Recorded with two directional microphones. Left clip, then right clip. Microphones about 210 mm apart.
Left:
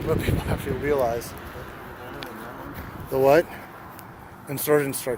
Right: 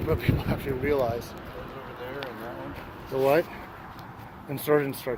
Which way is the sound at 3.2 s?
45° left (ahead or behind).